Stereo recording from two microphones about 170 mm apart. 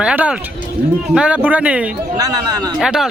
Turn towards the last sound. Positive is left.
turn(degrees=-5)  # may be behind; listen again after turning